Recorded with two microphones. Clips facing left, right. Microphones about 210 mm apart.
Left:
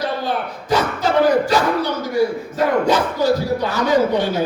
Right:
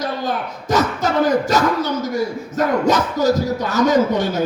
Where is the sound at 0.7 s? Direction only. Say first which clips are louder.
Even; 45° right (ahead or behind).